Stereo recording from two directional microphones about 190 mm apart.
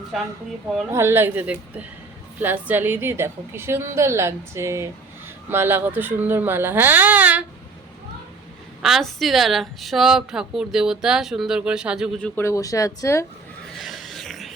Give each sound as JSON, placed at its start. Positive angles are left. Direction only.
{"t": 0.1, "sound": "a woman's voice", "side_deg": 0}
{"t": 0.9, "sound": "a woman's voice", "side_deg": -10}
{"t": 8.8, "sound": "a woman's voice", "side_deg": 0}
{"t": 12.4, "sound": "speech", "side_deg": 15}
{"t": 13.7, "sound": "a sound", "side_deg": 0}